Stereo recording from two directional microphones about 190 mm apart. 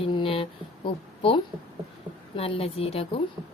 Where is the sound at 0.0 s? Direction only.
30° left (ahead or behind).